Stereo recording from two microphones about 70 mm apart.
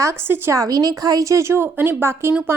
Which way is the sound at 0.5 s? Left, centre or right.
Right.